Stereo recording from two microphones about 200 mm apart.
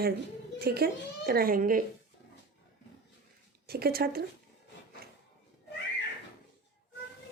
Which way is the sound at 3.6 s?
50° right (ahead or behind).